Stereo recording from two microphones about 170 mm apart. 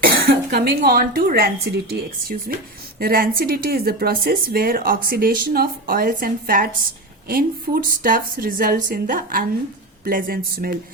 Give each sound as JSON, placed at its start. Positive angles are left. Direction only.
{"t": 0.0, "sound": "speech", "side_deg": -65}